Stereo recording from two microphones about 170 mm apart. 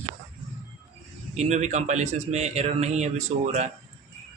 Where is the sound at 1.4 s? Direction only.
40° right (ahead or behind).